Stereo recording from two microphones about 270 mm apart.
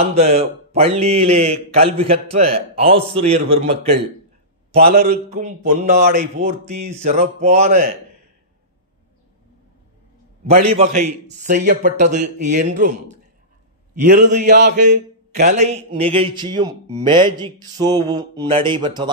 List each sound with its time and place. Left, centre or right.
0.1 s speech: right
4.8 s speech: right
10.8 s speech: right
16.9 s mantra: centre